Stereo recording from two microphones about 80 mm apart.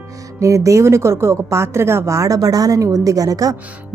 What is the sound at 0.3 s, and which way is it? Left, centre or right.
A woman's voice, right.